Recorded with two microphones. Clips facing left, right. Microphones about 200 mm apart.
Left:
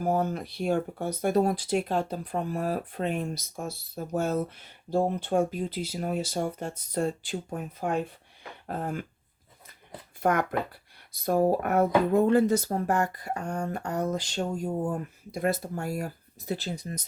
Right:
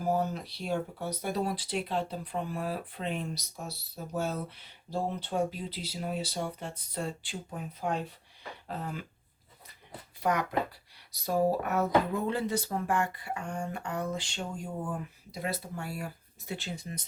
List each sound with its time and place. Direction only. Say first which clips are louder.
0.0 s speech: left 3 dB; 50° left (ahead or behind)
8.6 s a sound: left 6 dB; 50° left (ahead or behind)
10.2 s speech: left 3 dB; 50° left (ahead or behind)